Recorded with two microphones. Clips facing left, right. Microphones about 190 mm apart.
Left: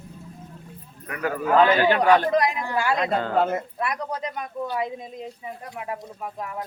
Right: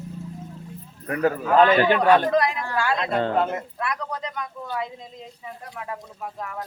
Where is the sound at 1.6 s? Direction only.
15° left (ahead or behind).